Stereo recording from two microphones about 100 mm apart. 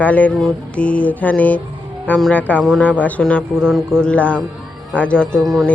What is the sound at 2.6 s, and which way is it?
Speech, 5° left (ahead or behind).